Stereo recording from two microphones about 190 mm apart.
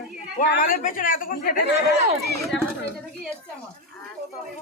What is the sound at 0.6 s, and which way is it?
Speech, 45° left (ahead or behind).